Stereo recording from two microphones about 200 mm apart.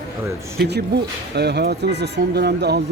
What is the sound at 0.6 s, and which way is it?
Speech, 55° right (ahead or behind).